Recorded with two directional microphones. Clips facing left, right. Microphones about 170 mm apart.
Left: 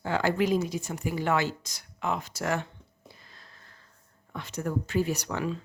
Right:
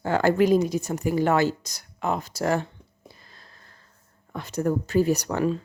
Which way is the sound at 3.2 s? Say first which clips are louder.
Right 2 dB; 40° right (ahead or behind).